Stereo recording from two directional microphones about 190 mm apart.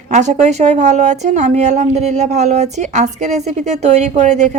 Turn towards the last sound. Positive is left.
turn(degrees=-40)  # may be behind; listen again after turning